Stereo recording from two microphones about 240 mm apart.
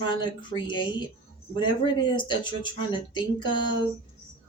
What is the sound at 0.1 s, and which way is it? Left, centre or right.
Speech, centre.